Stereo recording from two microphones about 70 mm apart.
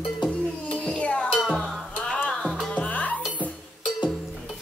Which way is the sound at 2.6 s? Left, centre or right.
Centre.